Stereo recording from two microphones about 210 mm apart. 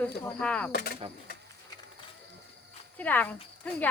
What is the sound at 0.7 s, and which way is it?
Speech, 50° left (ahead or behind).